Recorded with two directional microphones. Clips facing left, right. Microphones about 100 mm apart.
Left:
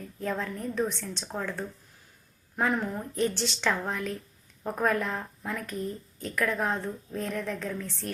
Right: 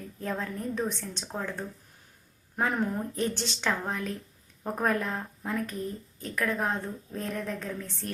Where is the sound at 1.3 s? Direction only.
20° right (ahead or behind).